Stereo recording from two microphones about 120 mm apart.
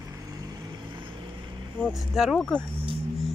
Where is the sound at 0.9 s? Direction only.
45° right (ahead or behind).